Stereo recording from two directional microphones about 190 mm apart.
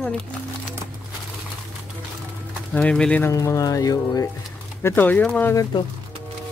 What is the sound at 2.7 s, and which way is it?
Speech, 5° left (ahead or behind).